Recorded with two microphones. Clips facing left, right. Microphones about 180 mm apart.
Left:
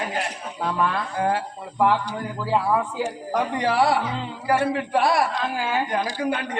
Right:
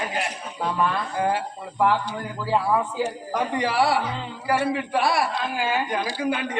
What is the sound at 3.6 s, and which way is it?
Speech, 5° right (ahead or behind).